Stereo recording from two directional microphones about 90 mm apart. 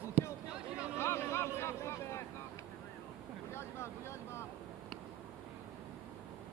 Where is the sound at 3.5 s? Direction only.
30° left (ahead or behind).